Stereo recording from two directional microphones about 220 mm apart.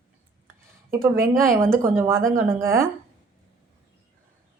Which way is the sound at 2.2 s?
40° right (ahead or behind).